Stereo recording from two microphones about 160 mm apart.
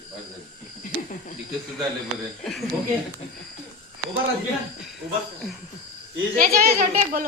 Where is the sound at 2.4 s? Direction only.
Centre (ahead or behind).